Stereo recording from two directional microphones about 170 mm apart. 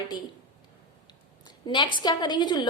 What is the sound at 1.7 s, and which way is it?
A woman's voice, 30° left (ahead or behind).